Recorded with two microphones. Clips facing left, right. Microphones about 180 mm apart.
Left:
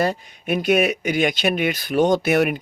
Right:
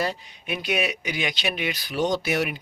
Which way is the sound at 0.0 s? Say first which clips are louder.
Left 6 dB; 50° left (ahead or behind).